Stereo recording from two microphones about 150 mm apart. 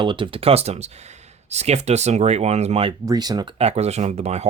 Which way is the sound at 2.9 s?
25° right (ahead or behind).